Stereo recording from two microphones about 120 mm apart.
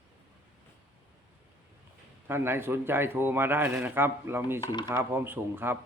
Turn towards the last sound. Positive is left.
turn(degrees=-20)  # may be behind; listen again after turning